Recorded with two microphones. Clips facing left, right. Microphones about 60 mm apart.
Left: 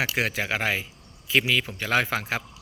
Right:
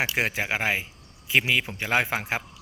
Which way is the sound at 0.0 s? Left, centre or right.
Right.